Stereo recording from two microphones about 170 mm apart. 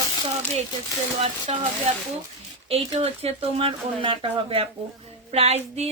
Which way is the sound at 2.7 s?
35° right (ahead or behind).